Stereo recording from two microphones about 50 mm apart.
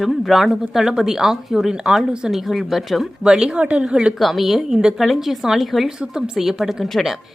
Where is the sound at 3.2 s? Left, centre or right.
Centre.